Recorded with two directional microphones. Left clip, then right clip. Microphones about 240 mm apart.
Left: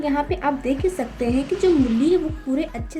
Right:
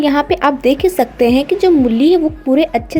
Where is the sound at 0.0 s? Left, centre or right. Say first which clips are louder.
Right 9 dB; right.